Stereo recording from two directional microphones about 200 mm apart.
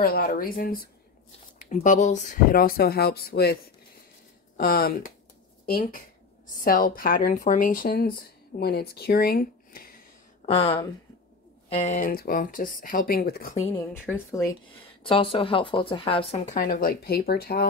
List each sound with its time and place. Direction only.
0.0 s speech: 50° left (ahead or behind)
4.6 s speech: 50° left (ahead or behind)
10.4 s speech: 30° left (ahead or behind); by 13.7 s 45° left (ahead or behind)
13.9 s a woman's voice: 10° left (ahead or behind)
14.8 s speech: 25° left (ahead or behind); by 17.6 s 50° left (ahead or behind)